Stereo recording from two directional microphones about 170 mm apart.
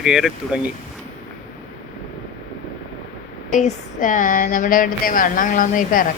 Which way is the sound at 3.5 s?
50° left (ahead or behind).